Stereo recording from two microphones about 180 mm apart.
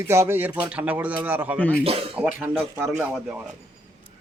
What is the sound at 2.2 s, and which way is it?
Speech, 15° right (ahead or behind).